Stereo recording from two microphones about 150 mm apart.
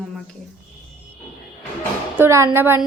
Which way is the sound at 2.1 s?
15° right (ahead or behind).